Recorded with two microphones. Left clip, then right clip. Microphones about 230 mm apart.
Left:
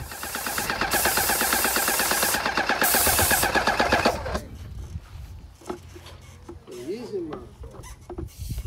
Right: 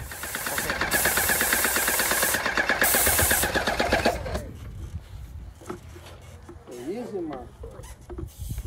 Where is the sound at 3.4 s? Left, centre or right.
Centre.